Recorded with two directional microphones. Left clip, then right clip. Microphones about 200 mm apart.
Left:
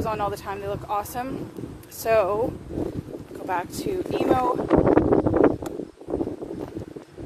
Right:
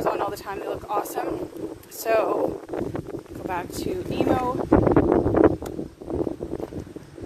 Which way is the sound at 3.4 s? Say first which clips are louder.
Left 2 dB; 25° left (ahead or behind).